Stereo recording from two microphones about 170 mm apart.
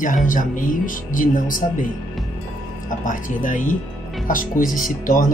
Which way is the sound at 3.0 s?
50° left (ahead or behind).